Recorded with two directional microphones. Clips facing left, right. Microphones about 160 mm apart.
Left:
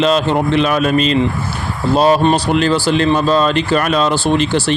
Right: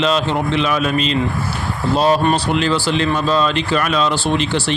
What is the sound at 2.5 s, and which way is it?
Speech, 45° left (ahead or behind).